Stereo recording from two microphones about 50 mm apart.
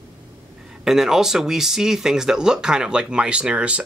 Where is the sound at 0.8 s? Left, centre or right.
Centre.